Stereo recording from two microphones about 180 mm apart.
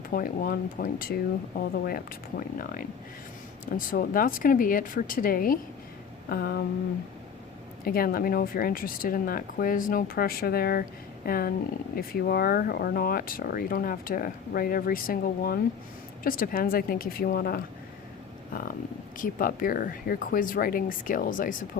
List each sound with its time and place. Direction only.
0.1 s a woman's voice: 50° left (ahead or behind)
3.7 s a woman's voice: 50° left (ahead or behind)
7.9 s a woman's voice: 55° left (ahead or behind)
19.1 s a woman's voice: 50° left (ahead or behind)